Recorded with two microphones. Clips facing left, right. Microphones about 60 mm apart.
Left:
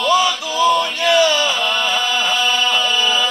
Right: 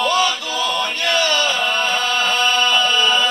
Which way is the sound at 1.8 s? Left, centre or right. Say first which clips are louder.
Even; centre.